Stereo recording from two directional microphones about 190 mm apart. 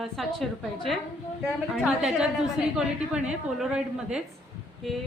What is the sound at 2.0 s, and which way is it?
A woman's voice, 5° right (ahead or behind).